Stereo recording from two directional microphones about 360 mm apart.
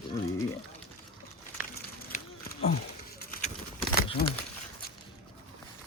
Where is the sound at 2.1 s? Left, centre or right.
Centre.